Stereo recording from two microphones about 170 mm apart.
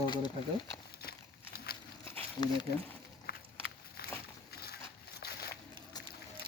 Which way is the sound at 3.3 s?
65° left (ahead or behind).